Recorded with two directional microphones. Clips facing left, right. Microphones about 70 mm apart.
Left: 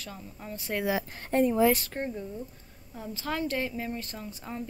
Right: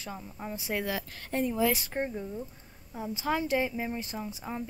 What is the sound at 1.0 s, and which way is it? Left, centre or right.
Speech, left.